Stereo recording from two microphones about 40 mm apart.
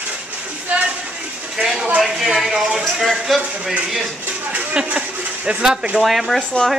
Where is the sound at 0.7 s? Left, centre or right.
Right.